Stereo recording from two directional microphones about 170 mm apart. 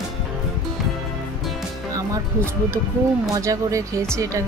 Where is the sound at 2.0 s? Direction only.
15° right (ahead or behind).